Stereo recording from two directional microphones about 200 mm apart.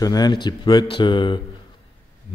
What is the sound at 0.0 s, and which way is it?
Speech, 20° left (ahead or behind).